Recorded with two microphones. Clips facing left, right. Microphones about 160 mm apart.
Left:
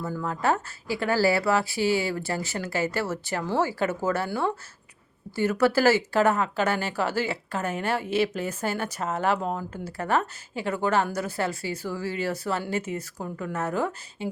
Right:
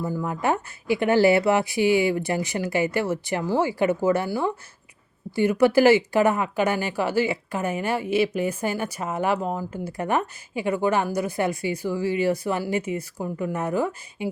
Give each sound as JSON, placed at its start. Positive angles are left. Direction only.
{"t": 0.0, "sound": "speech", "side_deg": -15}